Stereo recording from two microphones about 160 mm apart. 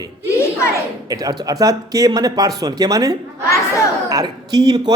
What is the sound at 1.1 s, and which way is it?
A man's voice, 25° right (ahead or behind).